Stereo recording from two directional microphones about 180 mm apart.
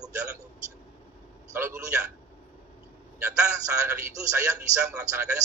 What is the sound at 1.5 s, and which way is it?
Speech, 15° right (ahead or behind).